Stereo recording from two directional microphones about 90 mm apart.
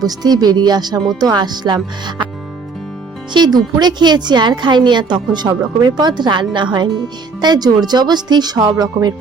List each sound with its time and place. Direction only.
0.0 s a woman's voice: 45° right (ahead or behind)
3.3 s a woman's voice: 50° right (ahead or behind)